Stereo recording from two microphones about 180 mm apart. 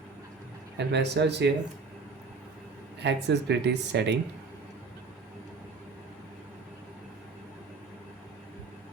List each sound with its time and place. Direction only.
0.8 s speech: 70° right (ahead or behind)
3.0 s speech: 70° right (ahead or behind)